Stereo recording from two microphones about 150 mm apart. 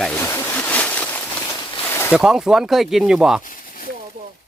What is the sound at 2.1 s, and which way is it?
Speech, 5° right (ahead or behind).